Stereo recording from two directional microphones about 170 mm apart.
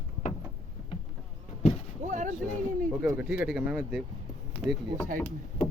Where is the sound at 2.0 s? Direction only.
45° right (ahead or behind).